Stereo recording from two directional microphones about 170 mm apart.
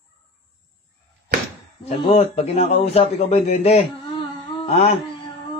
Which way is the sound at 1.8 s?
30° left (ahead or behind).